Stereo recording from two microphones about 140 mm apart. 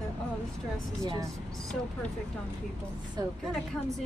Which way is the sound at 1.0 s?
25° right (ahead or behind).